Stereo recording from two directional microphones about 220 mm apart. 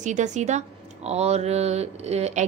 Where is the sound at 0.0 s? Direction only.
35° right (ahead or behind).